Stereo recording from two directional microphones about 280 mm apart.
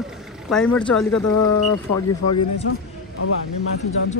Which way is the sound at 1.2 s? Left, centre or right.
Left.